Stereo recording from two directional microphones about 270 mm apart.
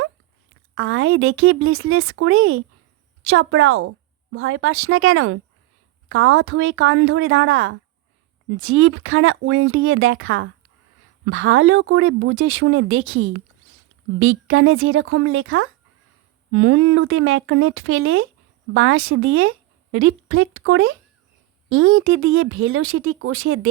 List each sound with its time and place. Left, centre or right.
0.8 s a woman's voice: right